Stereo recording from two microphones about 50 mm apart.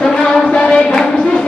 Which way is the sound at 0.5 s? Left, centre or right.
Centre.